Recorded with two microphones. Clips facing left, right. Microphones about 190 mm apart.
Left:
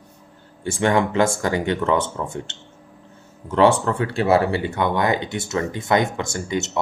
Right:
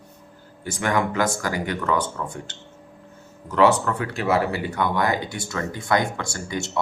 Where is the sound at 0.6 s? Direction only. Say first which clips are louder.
Left 4 dB; 25° left (ahead or behind).